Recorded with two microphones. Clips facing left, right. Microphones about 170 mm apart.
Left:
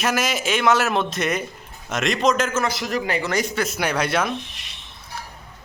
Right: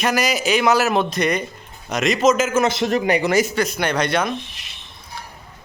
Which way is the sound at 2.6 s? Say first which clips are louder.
Right 5 dB; 25° right (ahead or behind).